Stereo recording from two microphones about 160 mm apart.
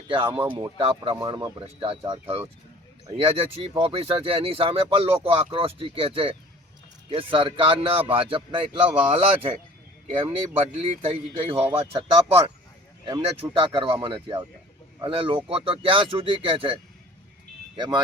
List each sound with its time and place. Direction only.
0.1 s speech: 35° right (ahead or behind)
10.2 s speech: 30° right (ahead or behind)
13.4 s speech: 20° right (ahead or behind)
13.7 s speech: 30° right (ahead or behind)
17.7 s speech: 30° right (ahead or behind)